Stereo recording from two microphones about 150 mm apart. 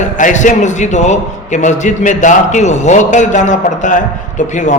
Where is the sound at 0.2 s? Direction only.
55° left (ahead or behind).